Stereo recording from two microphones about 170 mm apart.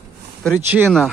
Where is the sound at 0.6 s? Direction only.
10° right (ahead or behind).